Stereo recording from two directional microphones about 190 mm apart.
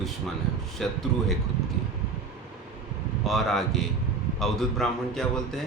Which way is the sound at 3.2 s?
Centre (ahead or behind).